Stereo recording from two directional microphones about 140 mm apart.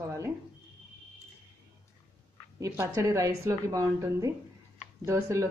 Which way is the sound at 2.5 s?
20° right (ahead or behind).